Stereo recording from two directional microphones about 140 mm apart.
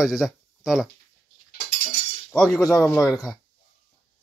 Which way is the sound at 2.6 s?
25° left (ahead or behind).